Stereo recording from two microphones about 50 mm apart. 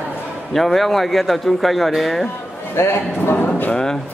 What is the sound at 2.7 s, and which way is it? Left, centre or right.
Speech, left.